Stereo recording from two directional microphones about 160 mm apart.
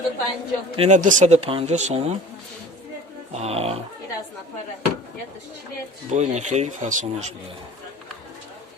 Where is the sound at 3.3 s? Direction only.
40° right (ahead or behind).